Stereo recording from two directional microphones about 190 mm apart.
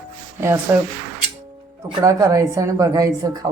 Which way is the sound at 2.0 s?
20° right (ahead or behind).